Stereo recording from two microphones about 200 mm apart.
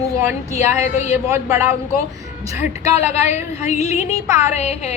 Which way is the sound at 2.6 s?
35° left (ahead or behind).